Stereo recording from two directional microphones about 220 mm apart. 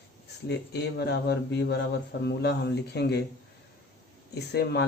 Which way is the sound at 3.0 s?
50° left (ahead or behind).